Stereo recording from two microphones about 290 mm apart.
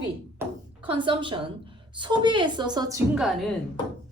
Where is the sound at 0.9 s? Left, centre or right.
Centre.